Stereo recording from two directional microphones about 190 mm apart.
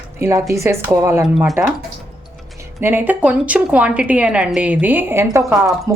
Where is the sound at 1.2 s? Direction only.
Centre (ahead or behind).